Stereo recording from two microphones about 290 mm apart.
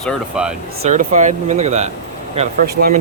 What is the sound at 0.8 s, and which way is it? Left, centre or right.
Speech, right.